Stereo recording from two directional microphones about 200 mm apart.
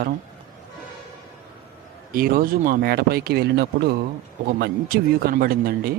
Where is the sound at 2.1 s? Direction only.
45° right (ahead or behind).